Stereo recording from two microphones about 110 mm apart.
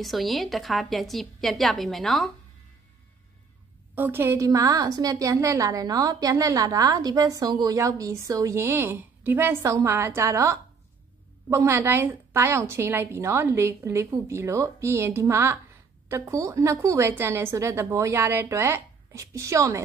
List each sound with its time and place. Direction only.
0.0 s a woman's voice: centre (ahead or behind)
3.9 s a woman's voice: 20° right (ahead or behind)